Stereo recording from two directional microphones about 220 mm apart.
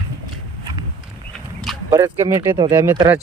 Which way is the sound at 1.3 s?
Centre (ahead or behind).